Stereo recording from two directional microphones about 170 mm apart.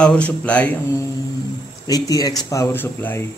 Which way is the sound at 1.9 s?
20° left (ahead or behind).